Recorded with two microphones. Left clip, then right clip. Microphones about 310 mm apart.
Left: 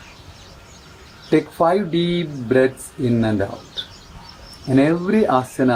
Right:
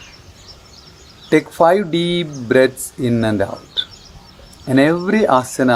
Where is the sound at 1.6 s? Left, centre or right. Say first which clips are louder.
Right 4 dB; right.